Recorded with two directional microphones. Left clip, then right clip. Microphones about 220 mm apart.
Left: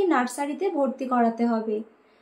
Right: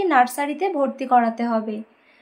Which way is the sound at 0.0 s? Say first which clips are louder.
Right 6 dB; 30° right (ahead or behind).